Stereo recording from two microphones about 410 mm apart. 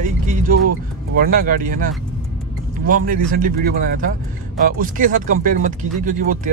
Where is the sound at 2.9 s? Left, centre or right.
Centre.